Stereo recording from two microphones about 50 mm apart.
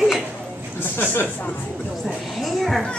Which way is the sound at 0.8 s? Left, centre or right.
Left.